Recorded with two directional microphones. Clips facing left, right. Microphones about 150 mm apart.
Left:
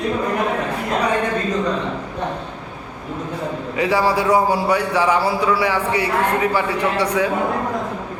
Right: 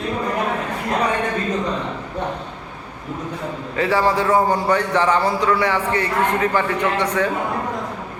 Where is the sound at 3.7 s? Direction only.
15° left (ahead or behind).